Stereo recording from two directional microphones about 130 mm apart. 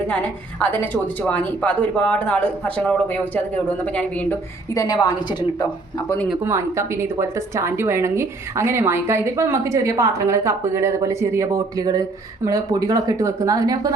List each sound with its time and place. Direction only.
0.1 s a woman's voice: 10° left (ahead or behind)
4.7 s a woman's voice: 30° left (ahead or behind)
6.4 s speech: 20° right (ahead or behind)